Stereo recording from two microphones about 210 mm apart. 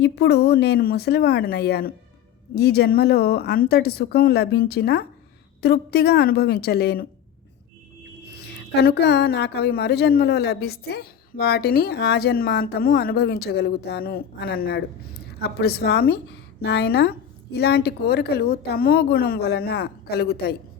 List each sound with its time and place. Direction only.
0.0 s a woman's voice: 50° left (ahead or behind)
8.5 s a woman's voice: 50° left (ahead or behind)